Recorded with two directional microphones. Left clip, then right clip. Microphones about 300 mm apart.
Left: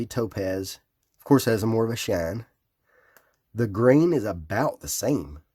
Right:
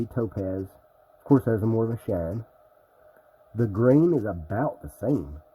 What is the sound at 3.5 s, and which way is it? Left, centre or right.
Speech, centre.